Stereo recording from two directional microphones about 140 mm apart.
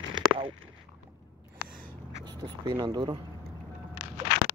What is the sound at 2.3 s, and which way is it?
Speech, 30° right (ahead or behind).